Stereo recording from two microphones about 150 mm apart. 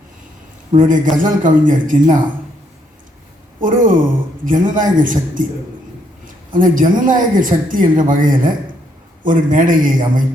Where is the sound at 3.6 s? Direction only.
60° right (ahead or behind).